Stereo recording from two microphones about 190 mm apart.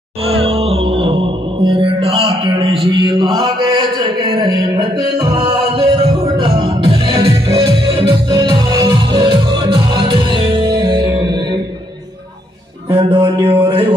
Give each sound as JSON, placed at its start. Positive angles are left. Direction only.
{"t": 0.3, "sound": "music", "side_deg": -30}
{"t": 12.9, "sound": "music", "side_deg": -25}